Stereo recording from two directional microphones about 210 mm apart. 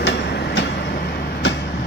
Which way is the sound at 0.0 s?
55° left (ahead or behind).